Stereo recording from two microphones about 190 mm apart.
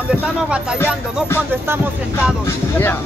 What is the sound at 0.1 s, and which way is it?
Speech, 5° right (ahead or behind).